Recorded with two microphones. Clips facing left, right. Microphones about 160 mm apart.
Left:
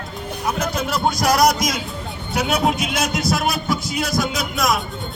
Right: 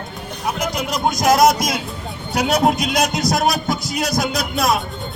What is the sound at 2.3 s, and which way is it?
Speech, 40° right (ahead or behind).